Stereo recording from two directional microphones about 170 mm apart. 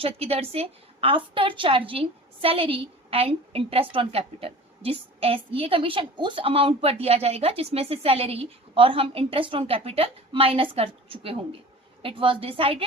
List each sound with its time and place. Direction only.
0.0 s a woman's voice: 35° right (ahead or behind)